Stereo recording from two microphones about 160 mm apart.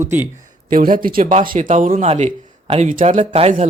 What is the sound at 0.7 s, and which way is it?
Speech, 60° right (ahead or behind).